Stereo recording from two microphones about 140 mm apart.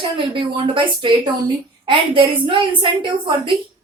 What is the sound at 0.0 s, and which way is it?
A woman's voice, 35° right (ahead or behind).